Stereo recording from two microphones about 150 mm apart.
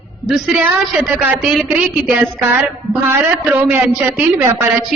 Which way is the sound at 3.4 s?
10° right (ahead or behind).